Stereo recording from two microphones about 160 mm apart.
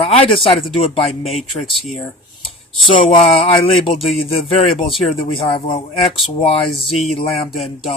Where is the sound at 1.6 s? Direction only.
Centre (ahead or behind).